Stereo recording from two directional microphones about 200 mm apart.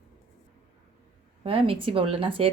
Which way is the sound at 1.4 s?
25° right (ahead or behind).